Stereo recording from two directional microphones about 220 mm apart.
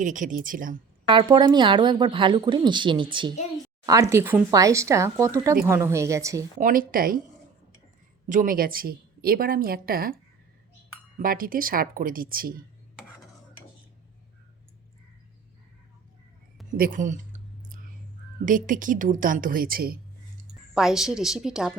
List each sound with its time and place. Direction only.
0.0 s a woman's voice: 35° right (ahead or behind)
1.0 s speech: 20° right (ahead or behind)
6.6 s a woman's voice: 40° right (ahead or behind)
8.3 s a woman's voice: 40° right (ahead or behind)
11.2 s a woman's voice: 40° right (ahead or behind)
16.7 s a sound: 40° right (ahead or behind)
18.4 s a woman's voice: 40° right (ahead or behind)
20.7 s speech: centre (ahead or behind)